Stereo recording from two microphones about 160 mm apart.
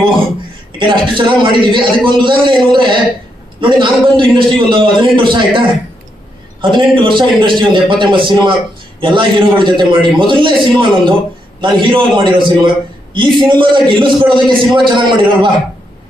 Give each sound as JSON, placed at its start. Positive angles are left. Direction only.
{"t": 0.8, "sound": "a man's voice", "side_deg": -30}